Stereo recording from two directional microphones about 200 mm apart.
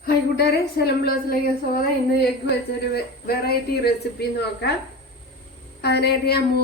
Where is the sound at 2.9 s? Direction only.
50° left (ahead or behind).